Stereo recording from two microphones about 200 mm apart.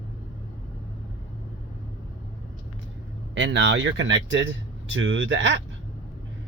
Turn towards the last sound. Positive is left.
turn(degrees=-70)  # may be behind; listen again after turning